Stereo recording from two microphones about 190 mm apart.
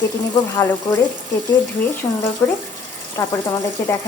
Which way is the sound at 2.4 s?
15° left (ahead or behind).